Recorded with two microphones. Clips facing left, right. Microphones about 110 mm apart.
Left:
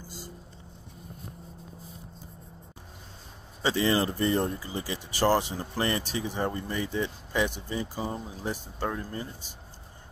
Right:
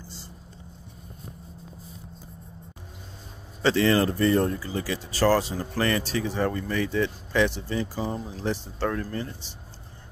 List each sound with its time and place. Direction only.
3.6 s speech: 15° left (ahead or behind)